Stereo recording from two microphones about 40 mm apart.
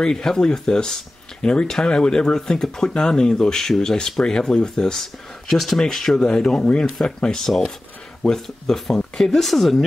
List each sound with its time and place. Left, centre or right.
0.0 s speech: centre
5.5 s speech: centre
7.4 s speech: centre